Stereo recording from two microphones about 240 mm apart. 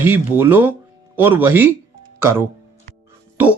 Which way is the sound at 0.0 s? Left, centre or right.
Centre.